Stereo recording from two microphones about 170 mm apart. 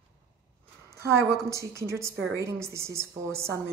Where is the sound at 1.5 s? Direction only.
15° right (ahead or behind).